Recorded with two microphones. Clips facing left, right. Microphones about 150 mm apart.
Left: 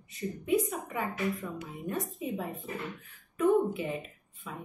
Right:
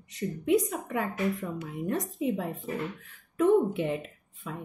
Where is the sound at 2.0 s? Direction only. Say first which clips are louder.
Right 4 dB; 90° right.